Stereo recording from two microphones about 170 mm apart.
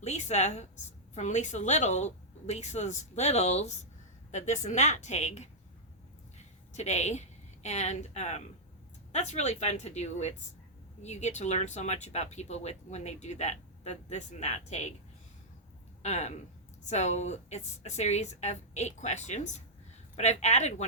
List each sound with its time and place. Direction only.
0.0 s a woman's voice: 40° left (ahead or behind)
16.0 s speech: 40° left (ahead or behind)